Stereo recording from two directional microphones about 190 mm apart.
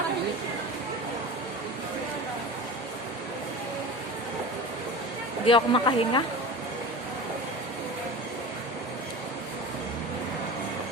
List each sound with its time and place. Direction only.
5.5 s a woman's voice: 25° left (ahead or behind)